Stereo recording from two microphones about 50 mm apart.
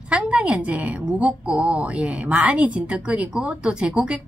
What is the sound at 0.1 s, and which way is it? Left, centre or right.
A woman's voice, right.